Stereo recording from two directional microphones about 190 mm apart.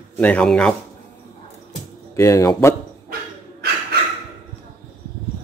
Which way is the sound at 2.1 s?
15° left (ahead or behind).